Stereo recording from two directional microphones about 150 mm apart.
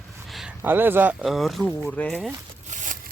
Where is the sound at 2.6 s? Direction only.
60° right (ahead or behind).